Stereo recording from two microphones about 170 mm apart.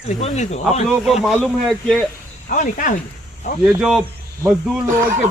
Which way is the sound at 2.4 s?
50° left (ahead or behind).